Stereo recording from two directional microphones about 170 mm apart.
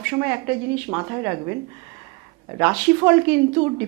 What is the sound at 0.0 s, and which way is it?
A woman's voice, 15° right (ahead or behind).